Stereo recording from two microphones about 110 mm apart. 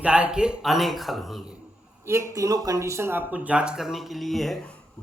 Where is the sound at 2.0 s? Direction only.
25° right (ahead or behind); by 4.6 s centre (ahead or behind).